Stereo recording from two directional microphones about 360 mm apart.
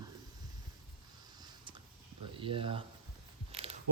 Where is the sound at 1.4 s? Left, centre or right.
Centre.